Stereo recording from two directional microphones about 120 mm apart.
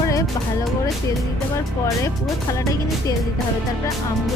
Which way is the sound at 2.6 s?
25° left (ahead or behind).